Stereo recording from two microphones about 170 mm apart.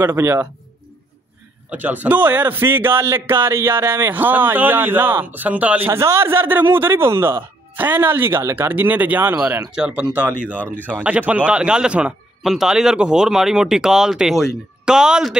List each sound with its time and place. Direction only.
0.0 s a man's voice: 10° right (ahead or behind)
1.7 s a man's voice: 10° right (ahead or behind)